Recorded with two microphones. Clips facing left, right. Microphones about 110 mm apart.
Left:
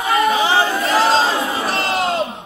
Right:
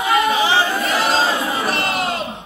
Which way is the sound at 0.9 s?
30° left (ahead or behind).